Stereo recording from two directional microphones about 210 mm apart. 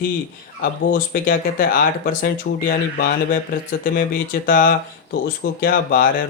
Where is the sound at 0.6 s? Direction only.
40° left (ahead or behind).